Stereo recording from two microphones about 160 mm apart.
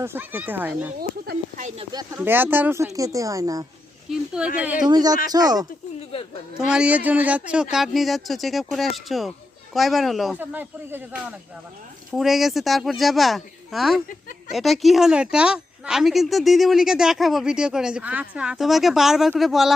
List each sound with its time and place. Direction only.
0.0 s speech: 15° right (ahead or behind)
0.9 s speech: 70° right (ahead or behind)
1.6 s speech: 40° right (ahead or behind)
2.1 s speech: 10° right (ahead or behind)
4.1 s speech: 5° right (ahead or behind)
4.9 s speech: 25° right (ahead or behind)
6.6 s speech: 5° right (ahead or behind)
10.4 s speech: 10° right (ahead or behind)
12.1 s speech: centre (ahead or behind)